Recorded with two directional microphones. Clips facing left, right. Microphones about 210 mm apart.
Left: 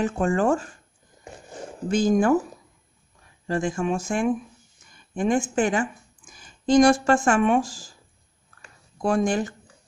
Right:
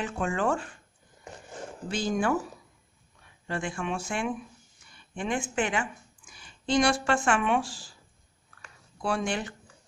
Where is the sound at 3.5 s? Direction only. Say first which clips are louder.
Left 7 dB; 40° left (ahead or behind).